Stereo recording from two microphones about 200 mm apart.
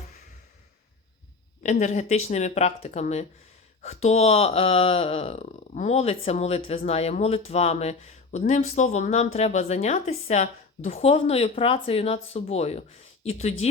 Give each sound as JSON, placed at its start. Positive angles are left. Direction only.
{"t": 1.6, "sound": "speech", "side_deg": 35}